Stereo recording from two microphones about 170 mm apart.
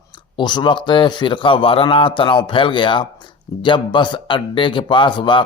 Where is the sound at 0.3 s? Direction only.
25° left (ahead or behind).